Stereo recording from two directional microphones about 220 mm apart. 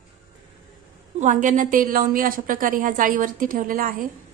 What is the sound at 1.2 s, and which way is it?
A woman's voice, 35° right (ahead or behind).